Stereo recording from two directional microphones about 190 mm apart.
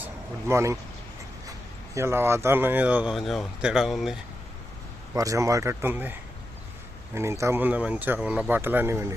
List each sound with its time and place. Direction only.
0.0 s speech: 15° right (ahead or behind)
2.0 s speech: 15° right (ahead or behind)
5.1 s speech: 15° right (ahead or behind)